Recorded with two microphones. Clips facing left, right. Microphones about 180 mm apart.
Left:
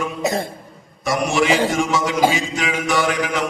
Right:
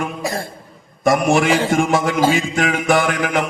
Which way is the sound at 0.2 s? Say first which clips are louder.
Left 3 dB; 20° left (ahead or behind).